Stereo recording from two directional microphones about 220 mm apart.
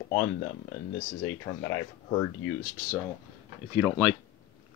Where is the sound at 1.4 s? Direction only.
15° left (ahead or behind).